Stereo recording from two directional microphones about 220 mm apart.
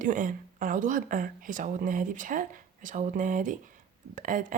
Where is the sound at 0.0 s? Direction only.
35° right (ahead or behind).